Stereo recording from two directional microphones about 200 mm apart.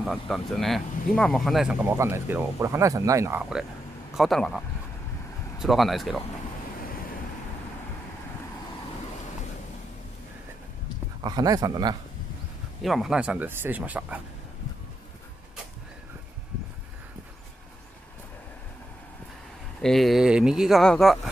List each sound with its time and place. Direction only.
0.0 s speech: centre (ahead or behind)
11.2 s speech: 20° right (ahead or behind)
12.8 s speech: centre (ahead or behind)
19.8 s speech: centre (ahead or behind)